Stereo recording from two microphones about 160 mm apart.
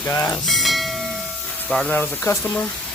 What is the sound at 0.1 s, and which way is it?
Speech, 15° left (ahead or behind).